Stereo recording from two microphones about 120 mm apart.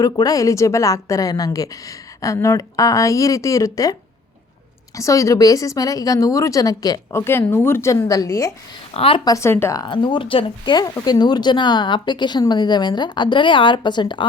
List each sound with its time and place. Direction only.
0.0 s a woman's voice: 30° left (ahead or behind)
4.9 s a woman's voice: 25° left (ahead or behind)
8.9 s a woman's voice: 50° left (ahead or behind)
9.2 s a woman's voice: 25° left (ahead or behind)
9.7 s a woman's voice: 40° left (ahead or behind)